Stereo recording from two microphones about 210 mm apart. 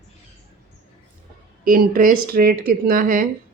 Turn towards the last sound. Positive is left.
turn(degrees=-40)  # may be behind; listen again after turning